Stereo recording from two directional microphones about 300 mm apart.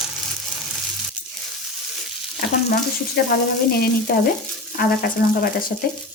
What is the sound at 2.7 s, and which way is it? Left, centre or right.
Frying, left.